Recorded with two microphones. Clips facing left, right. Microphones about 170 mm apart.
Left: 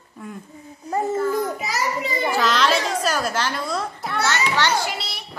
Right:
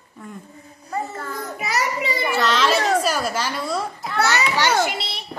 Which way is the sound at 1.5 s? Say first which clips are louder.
Right 1 dB; 65° right (ahead or behind).